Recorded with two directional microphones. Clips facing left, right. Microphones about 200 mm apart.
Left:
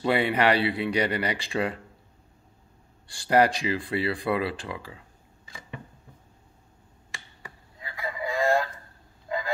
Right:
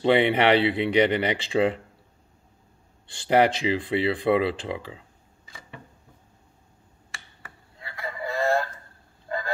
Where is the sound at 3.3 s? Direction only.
25° right (ahead or behind).